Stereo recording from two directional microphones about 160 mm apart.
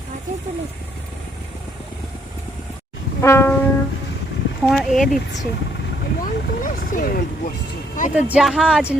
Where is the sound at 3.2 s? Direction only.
15° left (ahead or behind).